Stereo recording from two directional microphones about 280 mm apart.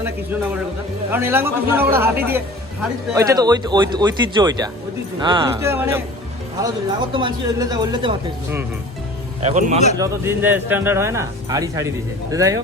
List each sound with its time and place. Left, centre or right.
1.1 s speech: centre
9.4 s speech: right
10.0 s speech: centre